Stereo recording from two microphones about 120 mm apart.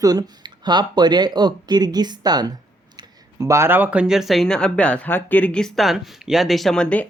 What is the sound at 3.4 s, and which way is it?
Speech, 25° right (ahead or behind).